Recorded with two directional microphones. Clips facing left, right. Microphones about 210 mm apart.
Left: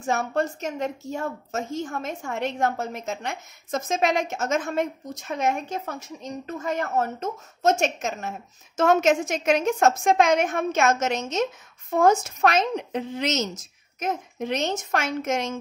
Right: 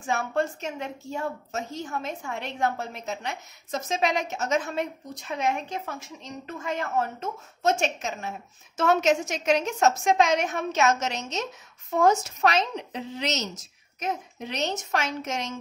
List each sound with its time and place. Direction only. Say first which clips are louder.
0.0 s a woman's voice: left 2 dB; 40° left (ahead or behind)